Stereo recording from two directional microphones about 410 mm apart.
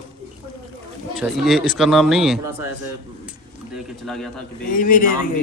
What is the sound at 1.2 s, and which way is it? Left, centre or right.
A man's voice, centre.